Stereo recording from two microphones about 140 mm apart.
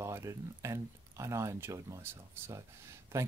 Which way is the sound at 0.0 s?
20° right (ahead or behind).